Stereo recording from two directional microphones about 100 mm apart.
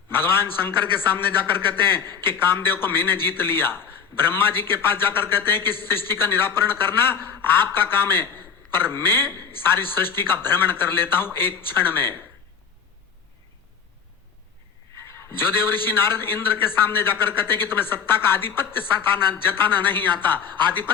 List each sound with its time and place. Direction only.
0.1 s a man's voice: 20° left (ahead or behind)
14.9 s a man's voice: 25° left (ahead or behind)